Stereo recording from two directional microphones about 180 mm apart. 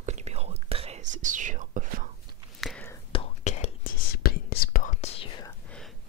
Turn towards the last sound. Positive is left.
turn(degrees=5)  # may be behind; listen again after turning